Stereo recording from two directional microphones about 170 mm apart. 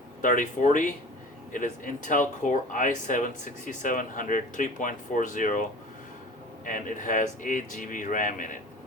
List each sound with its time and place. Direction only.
0.2 s speech: 50° left (ahead or behind)
6.7 s speech: 50° left (ahead or behind)